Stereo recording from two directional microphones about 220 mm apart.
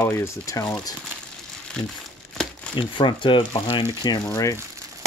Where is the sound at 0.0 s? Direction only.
10° left (ahead or behind).